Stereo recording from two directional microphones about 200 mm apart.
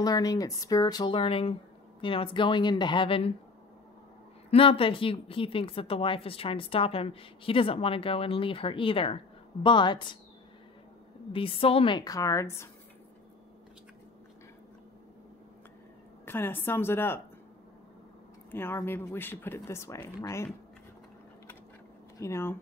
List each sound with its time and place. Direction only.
0.0 s a woman's voice: 20° left (ahead or behind)
4.5 s a woman's voice: 25° left (ahead or behind)
11.3 s a woman's voice: 25° left (ahead or behind)
16.3 s speech: 10° left (ahead or behind)
18.5 s speech: 10° left (ahead or behind)
22.2 s speech: 10° left (ahead or behind)